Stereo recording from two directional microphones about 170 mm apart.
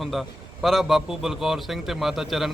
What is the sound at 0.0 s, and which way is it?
A man's voice, centre (ahead or behind).